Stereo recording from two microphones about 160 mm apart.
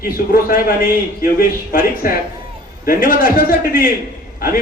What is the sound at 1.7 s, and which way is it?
Speech, 60° left (ahead or behind).